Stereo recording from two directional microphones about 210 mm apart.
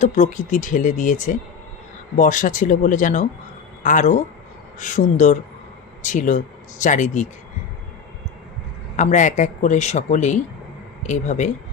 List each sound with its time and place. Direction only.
0.0 s speech: 35° left (ahead or behind)
9.0 s speech: 35° left (ahead or behind)